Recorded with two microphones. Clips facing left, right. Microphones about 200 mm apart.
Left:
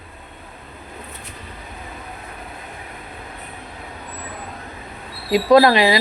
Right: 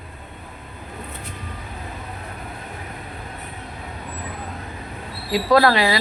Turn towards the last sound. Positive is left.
turn(degrees=20)  # may be behind; listen again after turning